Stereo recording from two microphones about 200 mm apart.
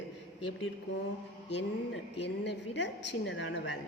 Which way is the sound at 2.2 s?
60° left (ahead or behind).